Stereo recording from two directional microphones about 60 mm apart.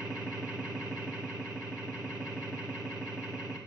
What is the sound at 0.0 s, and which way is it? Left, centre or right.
Vehicle, centre.